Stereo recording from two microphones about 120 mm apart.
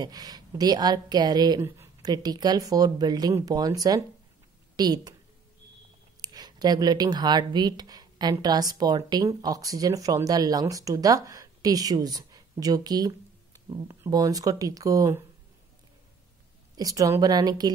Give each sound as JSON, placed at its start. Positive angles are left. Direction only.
{"t": 0.0, "sound": "speech", "side_deg": -35}
{"t": 1.6, "sound": "a sound", "side_deg": -20}
{"t": 2.0, "sound": "speech", "side_deg": -35}
{"t": 6.2, "sound": "speech", "side_deg": -35}
{"t": 16.7, "sound": "speech", "side_deg": -30}